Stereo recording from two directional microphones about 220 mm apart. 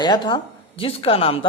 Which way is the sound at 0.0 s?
20° left (ahead or behind).